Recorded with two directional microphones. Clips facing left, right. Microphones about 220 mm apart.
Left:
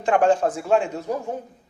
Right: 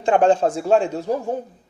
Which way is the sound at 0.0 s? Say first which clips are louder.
Right 2 dB; 25° right (ahead or behind).